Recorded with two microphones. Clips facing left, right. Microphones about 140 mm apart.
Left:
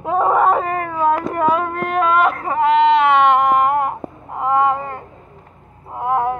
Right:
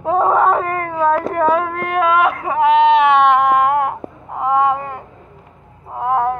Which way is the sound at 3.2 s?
Centre (ahead or behind).